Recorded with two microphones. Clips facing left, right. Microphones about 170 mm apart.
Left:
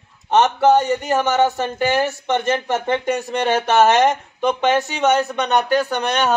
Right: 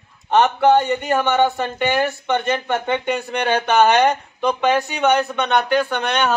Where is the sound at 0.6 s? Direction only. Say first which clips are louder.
Even; centre (ahead or behind).